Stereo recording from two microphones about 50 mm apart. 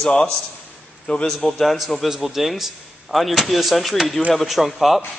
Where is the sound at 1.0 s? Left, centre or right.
Centre.